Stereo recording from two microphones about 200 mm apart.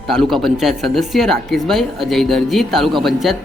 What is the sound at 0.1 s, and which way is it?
Speech, centre (ahead or behind).